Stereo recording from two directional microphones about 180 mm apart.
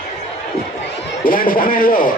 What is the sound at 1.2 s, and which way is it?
Speech, 50° left (ahead or behind).